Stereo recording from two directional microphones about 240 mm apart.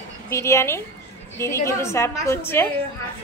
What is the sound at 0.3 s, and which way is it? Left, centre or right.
A woman's voice, centre.